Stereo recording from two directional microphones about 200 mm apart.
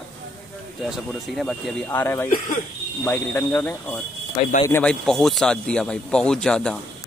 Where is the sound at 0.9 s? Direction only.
Centre (ahead or behind).